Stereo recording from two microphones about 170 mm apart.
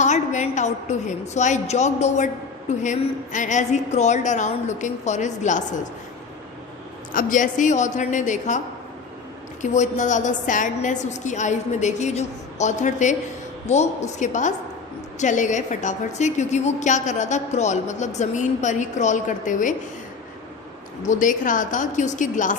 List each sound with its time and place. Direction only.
0.0 s a woman's voice: 45° left (ahead or behind)
7.1 s a woman's voice: 50° left (ahead or behind)
21.0 s a woman's voice: 50° left (ahead or behind)